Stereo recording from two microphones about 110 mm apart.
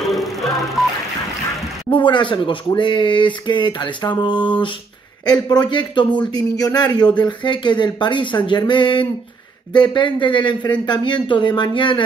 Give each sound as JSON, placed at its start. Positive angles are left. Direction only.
{"t": 0.1, "sound": "music", "side_deg": 0}
{"t": 1.9, "sound": "a man's voice", "side_deg": 45}